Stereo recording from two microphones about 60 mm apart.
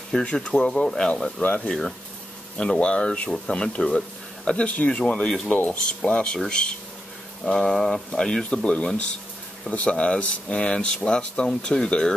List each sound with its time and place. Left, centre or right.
0.1 s speech: centre
0.6 s speech: centre
2.5 s speech: centre